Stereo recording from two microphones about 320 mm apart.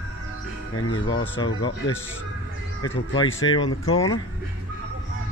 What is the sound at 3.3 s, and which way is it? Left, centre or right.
Speech, left.